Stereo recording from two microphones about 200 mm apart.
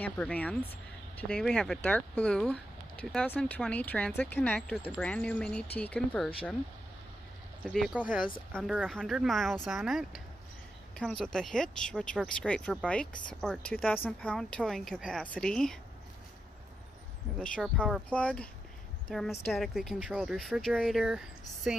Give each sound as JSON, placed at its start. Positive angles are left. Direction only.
{"t": 0.0, "sound": "speech", "side_deg": 5}
{"t": 7.7, "sound": "speech", "side_deg": 0}
{"t": 17.4, "sound": "speech", "side_deg": 5}